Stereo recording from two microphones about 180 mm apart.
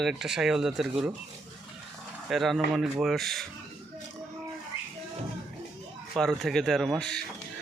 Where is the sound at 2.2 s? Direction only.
Centre (ahead or behind).